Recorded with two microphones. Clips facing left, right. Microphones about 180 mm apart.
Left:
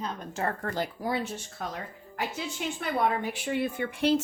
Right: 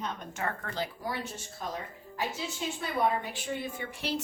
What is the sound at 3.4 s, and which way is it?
Speech, 65° left (ahead or behind).